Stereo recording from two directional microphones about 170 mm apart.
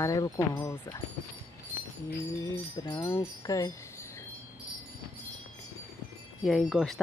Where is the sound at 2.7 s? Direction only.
25° left (ahead or behind).